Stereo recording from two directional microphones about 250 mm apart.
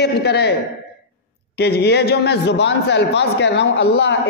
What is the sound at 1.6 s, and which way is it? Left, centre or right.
A man's voice, left.